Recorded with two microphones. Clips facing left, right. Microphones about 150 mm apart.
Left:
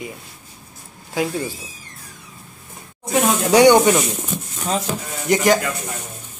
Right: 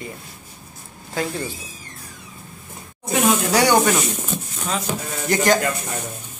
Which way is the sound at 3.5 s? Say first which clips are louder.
Left 7 dB; 20° left (ahead or behind).